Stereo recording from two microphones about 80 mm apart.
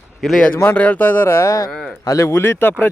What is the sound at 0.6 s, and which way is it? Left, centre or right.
Speech, left.